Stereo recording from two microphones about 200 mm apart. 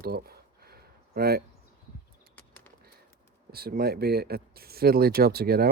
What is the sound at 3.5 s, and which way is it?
Speech, 50° right (ahead or behind).